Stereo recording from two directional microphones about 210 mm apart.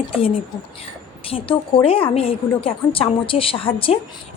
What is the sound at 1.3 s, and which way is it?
A woman's voice, 25° left (ahead or behind).